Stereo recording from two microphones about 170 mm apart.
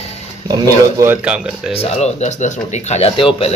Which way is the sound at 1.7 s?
40° left (ahead or behind).